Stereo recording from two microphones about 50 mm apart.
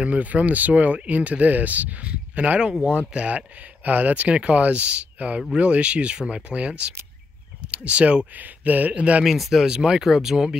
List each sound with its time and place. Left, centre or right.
0.0 s speech: right
9.2 s speech: centre